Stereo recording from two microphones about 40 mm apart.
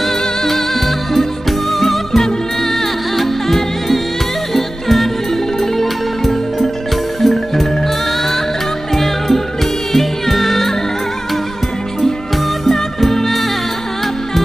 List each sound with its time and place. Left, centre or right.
0.0 s music: centre
8.9 s music: centre
12.6 s music: centre